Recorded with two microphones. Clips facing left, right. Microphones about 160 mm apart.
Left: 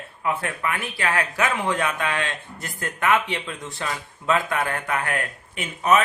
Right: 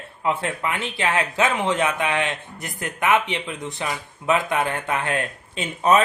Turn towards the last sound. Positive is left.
turn(degrees=-30)  # may be behind; listen again after turning